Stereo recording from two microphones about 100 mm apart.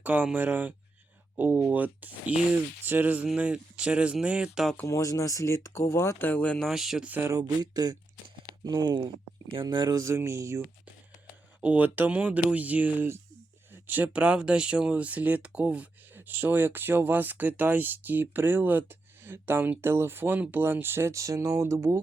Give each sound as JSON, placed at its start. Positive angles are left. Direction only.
{"t": 0.0, "sound": "speech", "side_deg": -15}
{"t": 4.9, "sound": "speech", "side_deg": 30}
{"t": 6.6, "sound": "speech", "side_deg": -5}
{"t": 7.1, "sound": "speech", "side_deg": -25}
{"t": 7.3, "sound": "speech", "side_deg": -45}
{"t": 9.5, "sound": "speech", "side_deg": -55}
{"t": 10.0, "sound": "speech", "side_deg": -30}
{"t": 11.6, "sound": "speech", "side_deg": -15}